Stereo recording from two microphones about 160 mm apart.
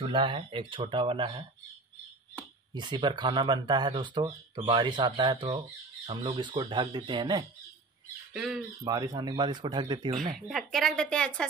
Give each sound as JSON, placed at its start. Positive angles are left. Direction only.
{"t": 0.1, "sound": "speech", "side_deg": -30}
{"t": 2.7, "sound": "speech", "side_deg": -30}
{"t": 8.3, "sound": "speech", "side_deg": -5}
{"t": 8.8, "sound": "speech", "side_deg": -25}
{"t": 10.5, "sound": "a woman's voice", "side_deg": 0}